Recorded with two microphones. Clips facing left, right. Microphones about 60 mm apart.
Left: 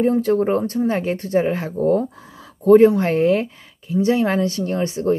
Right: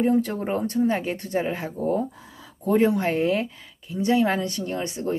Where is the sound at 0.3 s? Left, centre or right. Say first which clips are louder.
Left 13 dB; centre.